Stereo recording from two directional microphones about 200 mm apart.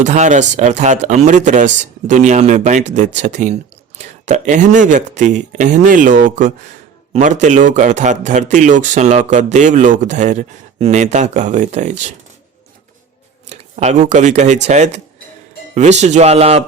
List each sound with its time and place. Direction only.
0.0 s a man's voice: 35° right (ahead or behind)
13.5 s a man's voice: 35° right (ahead or behind)